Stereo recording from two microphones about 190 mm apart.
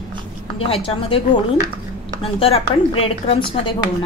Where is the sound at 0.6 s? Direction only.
30° left (ahead or behind).